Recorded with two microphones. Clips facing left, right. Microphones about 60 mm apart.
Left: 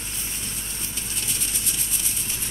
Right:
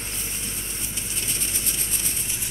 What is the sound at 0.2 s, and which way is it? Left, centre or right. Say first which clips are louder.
Vehicle: right 1 dB; centre.